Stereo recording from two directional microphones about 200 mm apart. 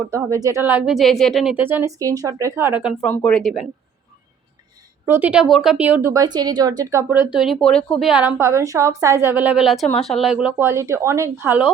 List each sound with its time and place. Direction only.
0.1 s speech: 15° right (ahead or behind)
3.1 s speech: 5° left (ahead or behind)
5.0 s speech: 10° right (ahead or behind)